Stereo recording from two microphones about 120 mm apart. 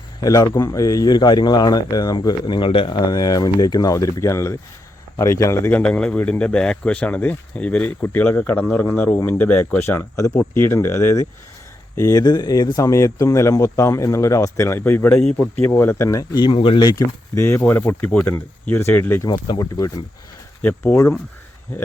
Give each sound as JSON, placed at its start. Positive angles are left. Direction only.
{"t": 0.2, "sound": "speech", "side_deg": 30}
{"t": 5.7, "sound": "speech", "side_deg": 10}
{"t": 15.3, "sound": "speech", "side_deg": 5}
{"t": 16.5, "sound": "speech", "side_deg": 45}
{"t": 19.3, "sound": "speech", "side_deg": 30}
{"t": 20.6, "sound": "speech", "side_deg": 15}